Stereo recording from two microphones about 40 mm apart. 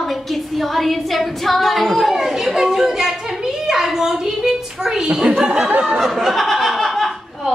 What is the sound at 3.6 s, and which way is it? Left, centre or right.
A child's voice, centre.